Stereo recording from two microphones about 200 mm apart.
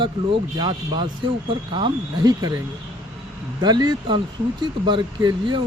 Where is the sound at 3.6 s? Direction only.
20° right (ahead or behind).